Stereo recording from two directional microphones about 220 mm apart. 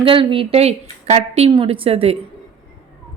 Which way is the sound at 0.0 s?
25° right (ahead or behind).